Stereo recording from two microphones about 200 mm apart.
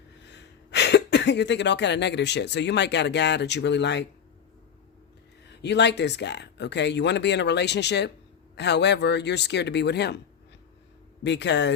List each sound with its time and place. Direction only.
0.3 s speech: 60° left (ahead or behind)
5.6 s speech: 60° left (ahead or behind)
11.2 s speech: 60° left (ahead or behind)